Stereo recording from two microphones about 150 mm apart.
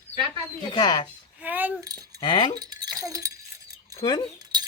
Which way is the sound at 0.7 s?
30° left (ahead or behind).